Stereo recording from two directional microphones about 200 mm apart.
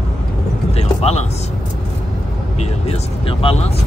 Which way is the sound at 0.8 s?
30° left (ahead or behind).